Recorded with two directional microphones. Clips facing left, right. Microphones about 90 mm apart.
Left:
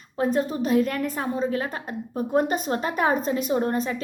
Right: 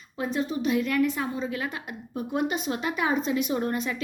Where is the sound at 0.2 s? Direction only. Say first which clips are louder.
Left 4 dB; 40° left (ahead or behind).